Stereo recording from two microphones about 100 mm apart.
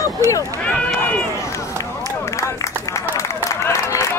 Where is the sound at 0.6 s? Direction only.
10° left (ahead or behind).